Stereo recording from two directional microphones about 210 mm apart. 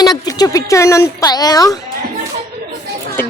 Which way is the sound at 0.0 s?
20° left (ahead or behind).